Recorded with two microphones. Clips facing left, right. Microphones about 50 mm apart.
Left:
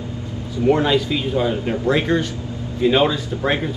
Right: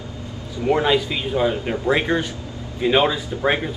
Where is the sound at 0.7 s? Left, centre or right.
Centre.